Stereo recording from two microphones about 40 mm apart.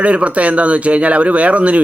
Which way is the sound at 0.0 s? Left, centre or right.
Right.